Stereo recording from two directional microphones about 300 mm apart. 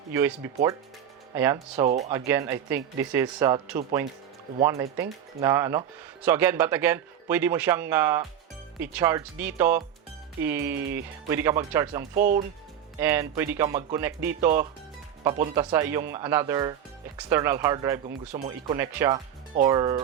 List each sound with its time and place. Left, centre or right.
0.1 s a man's voice: centre
4.6 s a man's voice: centre
12.2 s speech: right
13.0 s a man's voice: centre
18.8 s a man's voice: centre